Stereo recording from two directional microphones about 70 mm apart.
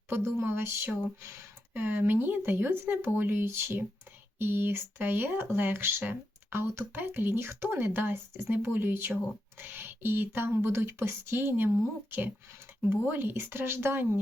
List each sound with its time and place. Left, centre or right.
0.1 s speech: right
12.9 s speech: right